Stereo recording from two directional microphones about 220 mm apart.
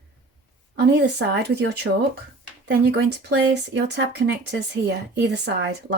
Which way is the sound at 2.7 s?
50° right (ahead or behind).